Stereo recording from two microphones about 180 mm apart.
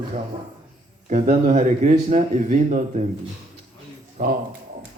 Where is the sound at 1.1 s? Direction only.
45° right (ahead or behind).